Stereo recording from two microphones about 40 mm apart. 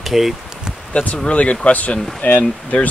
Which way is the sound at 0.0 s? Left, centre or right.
Centre.